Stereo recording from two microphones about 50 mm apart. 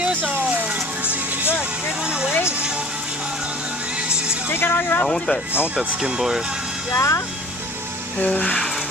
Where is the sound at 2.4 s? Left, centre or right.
Centre.